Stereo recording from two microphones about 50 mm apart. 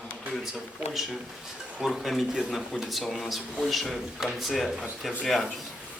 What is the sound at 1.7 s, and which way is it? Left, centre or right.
Speech, centre.